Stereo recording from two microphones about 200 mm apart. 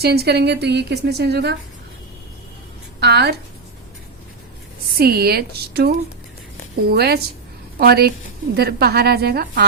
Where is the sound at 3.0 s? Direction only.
55° right (ahead or behind).